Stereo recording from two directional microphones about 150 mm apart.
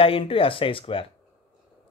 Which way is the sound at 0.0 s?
40° left (ahead or behind).